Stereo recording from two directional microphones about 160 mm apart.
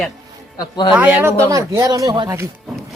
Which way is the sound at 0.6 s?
30° left (ahead or behind).